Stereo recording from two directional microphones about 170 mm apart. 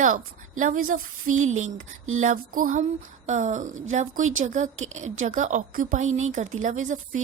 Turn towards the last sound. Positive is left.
turn(degrees=-45)  # may be behind; listen again after turning